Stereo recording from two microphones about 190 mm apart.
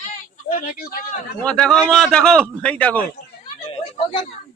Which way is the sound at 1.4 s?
5° left (ahead or behind).